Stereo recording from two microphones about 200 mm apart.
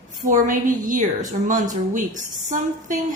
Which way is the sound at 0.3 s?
40° right (ahead or behind).